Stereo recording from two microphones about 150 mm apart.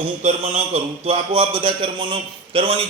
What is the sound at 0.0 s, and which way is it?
A man's voice, 45° right (ahead or behind).